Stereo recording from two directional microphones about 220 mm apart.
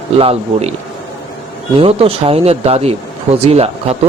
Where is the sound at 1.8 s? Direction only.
25° right (ahead or behind).